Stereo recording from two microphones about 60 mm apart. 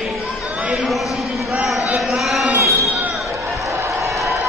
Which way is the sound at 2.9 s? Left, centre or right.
Right.